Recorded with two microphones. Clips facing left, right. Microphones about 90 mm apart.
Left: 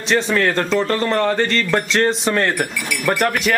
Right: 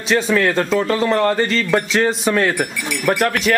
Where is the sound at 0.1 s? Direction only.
Centre (ahead or behind).